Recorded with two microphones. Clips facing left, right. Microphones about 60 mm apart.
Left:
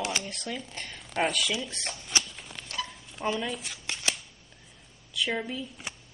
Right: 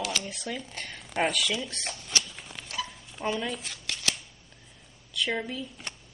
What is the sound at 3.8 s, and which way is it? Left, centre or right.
Shuffling cards, left.